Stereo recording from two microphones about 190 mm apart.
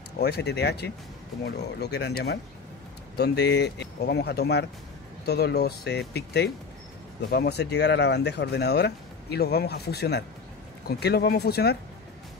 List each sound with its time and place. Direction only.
0.2 s speech: 60° left (ahead or behind)